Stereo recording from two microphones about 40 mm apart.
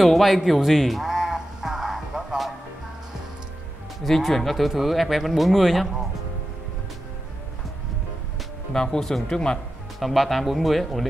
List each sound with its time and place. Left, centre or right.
0.0 s speech: centre
1.1 s a sound: centre
4.0 s speech: centre
8.7 s speech: centre
9.9 s speech: centre